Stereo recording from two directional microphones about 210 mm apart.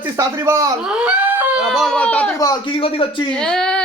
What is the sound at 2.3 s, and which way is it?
Speech, 20° left (ahead or behind).